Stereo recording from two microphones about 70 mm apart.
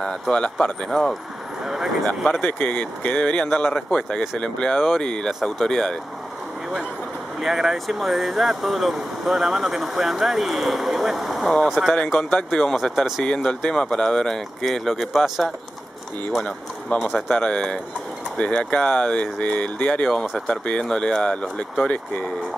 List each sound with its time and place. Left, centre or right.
0.0 s speech: centre
2.4 s speech: left
4.7 s speech: centre
7.3 s speech: centre
12.0 s speech: centre
13.2 s speech: centre
16.4 s speech: centre